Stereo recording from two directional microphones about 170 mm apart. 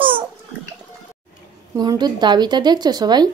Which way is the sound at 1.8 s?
25° right (ahead or behind).